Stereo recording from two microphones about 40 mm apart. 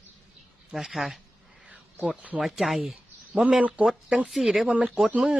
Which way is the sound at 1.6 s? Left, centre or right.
Right.